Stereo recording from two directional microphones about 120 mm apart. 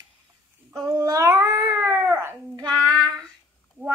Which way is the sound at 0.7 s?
25° right (ahead or behind).